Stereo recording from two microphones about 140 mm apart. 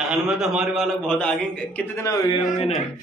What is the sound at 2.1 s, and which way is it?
Speech, 30° left (ahead or behind).